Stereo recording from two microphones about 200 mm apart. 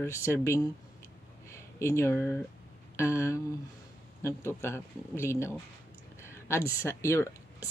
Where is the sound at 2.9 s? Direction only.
15° left (ahead or behind).